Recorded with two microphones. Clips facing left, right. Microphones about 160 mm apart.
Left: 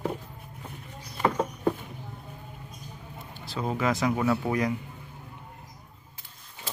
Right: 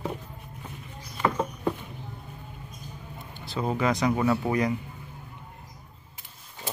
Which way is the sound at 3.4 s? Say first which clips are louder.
Right 2 dB; centre (ahead or behind).